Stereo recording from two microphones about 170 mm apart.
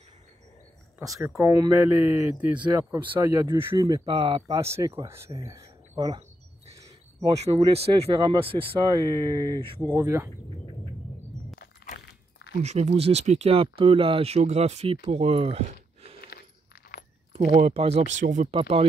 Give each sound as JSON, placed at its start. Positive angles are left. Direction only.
{"t": 0.9, "sound": "speech", "side_deg": -15}
{"t": 4.5, "sound": "speech", "side_deg": -15}
{"t": 6.8, "sound": "a sound", "side_deg": -20}
{"t": 7.7, "sound": "speech", "side_deg": -35}
{"t": 9.8, "sound": "speech", "side_deg": -15}
{"t": 11.5, "sound": "a sound", "side_deg": 55}
{"t": 12.6, "sound": "speech", "side_deg": -40}
{"t": 17.3, "sound": "speech", "side_deg": -40}
{"t": 18.6, "sound": "speech", "side_deg": -35}